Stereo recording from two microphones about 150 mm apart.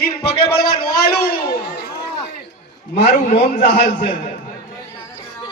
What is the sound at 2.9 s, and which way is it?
Speech, 90° left.